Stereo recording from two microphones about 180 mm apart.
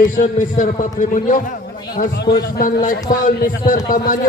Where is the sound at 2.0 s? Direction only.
65° left (ahead or behind).